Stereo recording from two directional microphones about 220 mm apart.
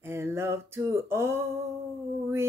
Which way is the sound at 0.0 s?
10° right (ahead or behind).